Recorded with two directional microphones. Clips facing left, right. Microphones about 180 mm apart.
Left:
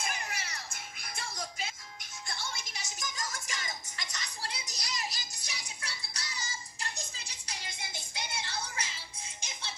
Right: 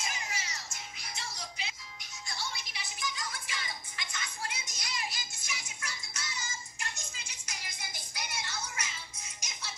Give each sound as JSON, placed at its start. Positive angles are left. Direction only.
{"t": 0.0, "sound": "music", "side_deg": 60}